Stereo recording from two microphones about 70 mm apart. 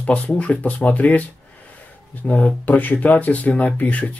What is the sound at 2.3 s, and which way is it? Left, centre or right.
Speech, left.